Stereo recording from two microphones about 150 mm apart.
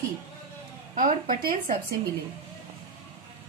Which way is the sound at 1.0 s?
65° right (ahead or behind).